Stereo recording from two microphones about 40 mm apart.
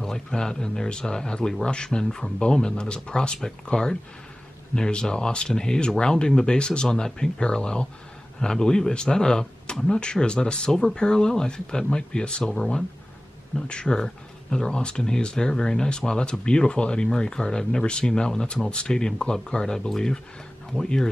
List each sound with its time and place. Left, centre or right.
0.0 s speech: centre
2.0 s speech: centre
2.3 s speech: left